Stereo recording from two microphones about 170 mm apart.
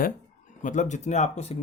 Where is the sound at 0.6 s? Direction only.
45° left (ahead or behind).